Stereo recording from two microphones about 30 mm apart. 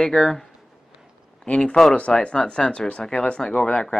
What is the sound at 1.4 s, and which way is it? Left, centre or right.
Speech, left.